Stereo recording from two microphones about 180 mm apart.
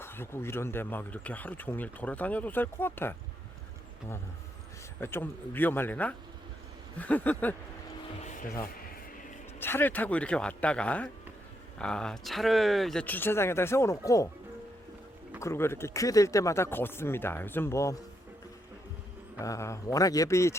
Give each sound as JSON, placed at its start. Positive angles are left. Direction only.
{"t": 0.0, "sound": "speech", "side_deg": 15}
{"t": 4.9, "sound": "speech", "side_deg": 10}
{"t": 9.6, "sound": "speech", "side_deg": 10}
{"t": 15.4, "sound": "speech", "side_deg": 15}
{"t": 19.4, "sound": "speech", "side_deg": 15}